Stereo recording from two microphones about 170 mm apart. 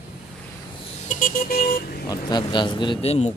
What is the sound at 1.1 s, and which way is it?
Vehicle, 50° left (ahead or behind).